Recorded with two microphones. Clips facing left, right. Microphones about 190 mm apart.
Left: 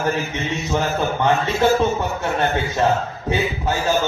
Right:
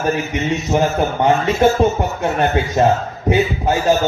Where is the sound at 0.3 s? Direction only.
20° right (ahead or behind).